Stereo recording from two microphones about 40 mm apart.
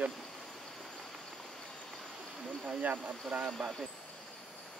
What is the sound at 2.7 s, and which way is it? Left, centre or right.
Speech, right.